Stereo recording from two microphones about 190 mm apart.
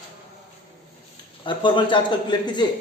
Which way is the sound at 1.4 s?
25° left (ahead or behind).